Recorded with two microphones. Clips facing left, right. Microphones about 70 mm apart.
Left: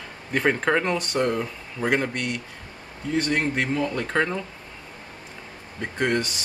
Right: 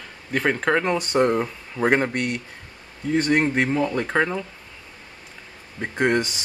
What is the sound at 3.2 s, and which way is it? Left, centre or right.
Speech, right.